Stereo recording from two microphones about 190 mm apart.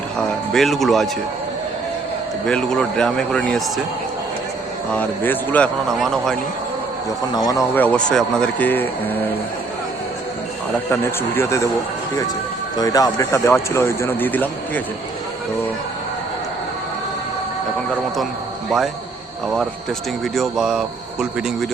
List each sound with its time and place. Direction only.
0.2 s a man's voice: centre (ahead or behind)
2.5 s a man's voice: 5° left (ahead or behind)
4.9 s a man's voice: 10° left (ahead or behind)
7.3 s speech: 20° left (ahead or behind)
7.8 s speech: 5° left (ahead or behind)
10.9 s speech: 10° left (ahead or behind)
12.7 s speech: 20° left (ahead or behind)
20.2 s a man's voice: centre (ahead or behind)